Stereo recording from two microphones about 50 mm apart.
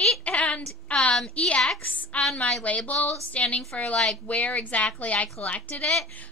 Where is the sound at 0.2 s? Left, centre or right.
Left.